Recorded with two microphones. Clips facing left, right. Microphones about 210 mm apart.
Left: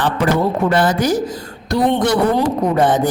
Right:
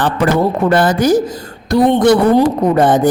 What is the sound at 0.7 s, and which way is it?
Speech, 50° right (ahead or behind).